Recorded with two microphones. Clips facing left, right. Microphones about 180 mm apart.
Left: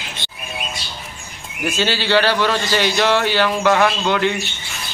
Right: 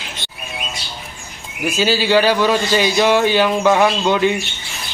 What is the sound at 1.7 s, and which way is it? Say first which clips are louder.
A man's voice: right 3 dB; 10° right (ahead or behind).